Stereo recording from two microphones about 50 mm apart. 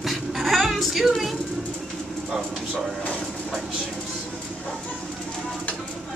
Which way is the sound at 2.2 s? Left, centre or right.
Centre.